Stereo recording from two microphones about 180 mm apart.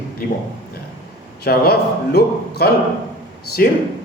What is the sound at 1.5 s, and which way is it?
A man's voice, 60° left (ahead or behind).